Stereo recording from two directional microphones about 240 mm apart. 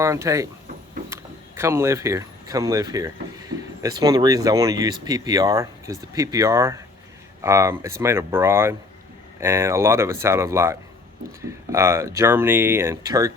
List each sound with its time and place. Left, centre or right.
0.0 s speech: centre